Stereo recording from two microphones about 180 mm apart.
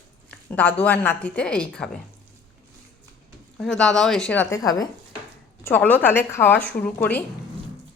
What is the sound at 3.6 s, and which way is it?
Speech, 5° left (ahead or behind).